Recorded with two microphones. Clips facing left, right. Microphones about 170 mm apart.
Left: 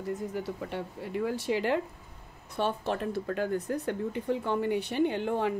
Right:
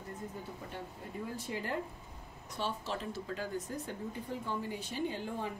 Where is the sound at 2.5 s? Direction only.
55° left (ahead or behind).